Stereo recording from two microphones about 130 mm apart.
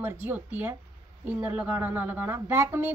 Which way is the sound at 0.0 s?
10° right (ahead or behind).